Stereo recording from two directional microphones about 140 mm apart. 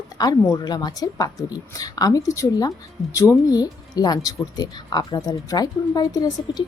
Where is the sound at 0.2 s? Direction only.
30° left (ahead or behind).